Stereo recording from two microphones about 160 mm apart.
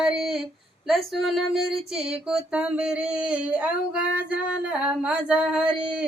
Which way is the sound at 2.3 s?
5° right (ahead or behind).